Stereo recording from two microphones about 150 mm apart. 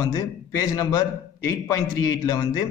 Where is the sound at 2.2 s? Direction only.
25° left (ahead or behind).